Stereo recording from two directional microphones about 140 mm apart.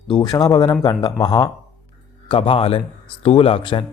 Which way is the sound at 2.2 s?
40° left (ahead or behind).